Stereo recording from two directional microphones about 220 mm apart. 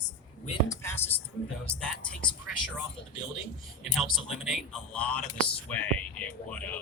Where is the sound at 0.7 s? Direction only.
10° left (ahead or behind).